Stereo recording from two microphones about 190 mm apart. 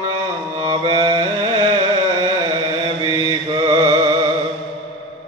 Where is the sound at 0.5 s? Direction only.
25° right (ahead or behind).